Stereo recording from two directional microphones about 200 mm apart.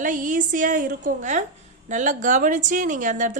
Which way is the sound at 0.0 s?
40° right (ahead or behind).